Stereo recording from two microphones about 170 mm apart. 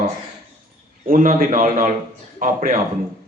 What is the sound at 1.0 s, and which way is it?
A man's voice, 55° right (ahead or behind).